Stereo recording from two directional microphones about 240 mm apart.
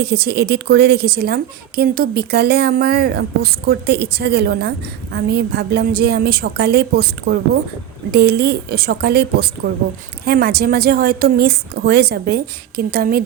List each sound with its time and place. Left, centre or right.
0.0 s a woman's voice: right